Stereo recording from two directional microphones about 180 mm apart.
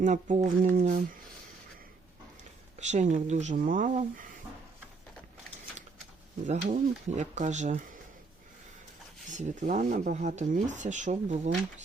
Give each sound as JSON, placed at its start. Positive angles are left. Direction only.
{"t": 0.0, "sound": "speech", "side_deg": -40}
{"t": 2.7, "sound": "speech", "side_deg": -40}
{"t": 6.4, "sound": "speech", "side_deg": -45}
{"t": 9.2, "sound": "speech", "side_deg": -45}